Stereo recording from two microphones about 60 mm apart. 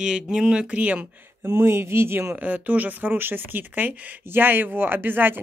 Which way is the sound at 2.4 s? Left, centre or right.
Right.